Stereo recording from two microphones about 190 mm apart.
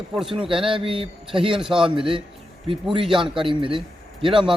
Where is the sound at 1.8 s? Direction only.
25° right (ahead or behind).